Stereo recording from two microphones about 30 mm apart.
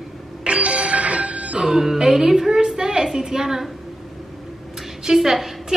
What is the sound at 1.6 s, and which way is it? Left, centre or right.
A woman's voice, centre.